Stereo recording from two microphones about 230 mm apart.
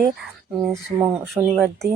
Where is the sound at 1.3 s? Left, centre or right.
Centre.